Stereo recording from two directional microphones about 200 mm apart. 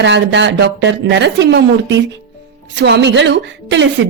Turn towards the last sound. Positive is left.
turn(degrees=-65)  # may be behind; listen again after turning